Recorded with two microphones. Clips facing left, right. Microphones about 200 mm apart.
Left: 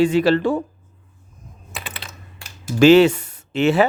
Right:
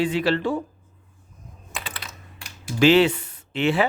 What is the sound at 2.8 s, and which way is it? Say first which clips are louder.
Speech: left 5 dB; 45° left (ahead or behind).